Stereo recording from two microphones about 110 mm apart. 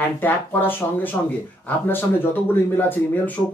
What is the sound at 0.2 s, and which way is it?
Speech, 20° left (ahead or behind).